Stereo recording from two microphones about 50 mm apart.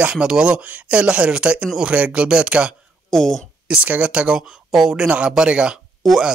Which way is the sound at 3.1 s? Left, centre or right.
Centre.